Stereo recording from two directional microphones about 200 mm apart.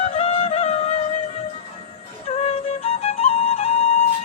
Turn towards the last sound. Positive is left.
turn(degrees=30)  # may be behind; listen again after turning